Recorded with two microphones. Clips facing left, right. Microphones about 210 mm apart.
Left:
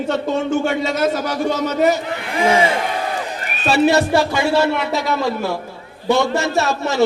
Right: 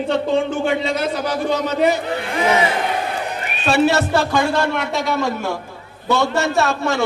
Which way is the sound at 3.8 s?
15° left (ahead or behind).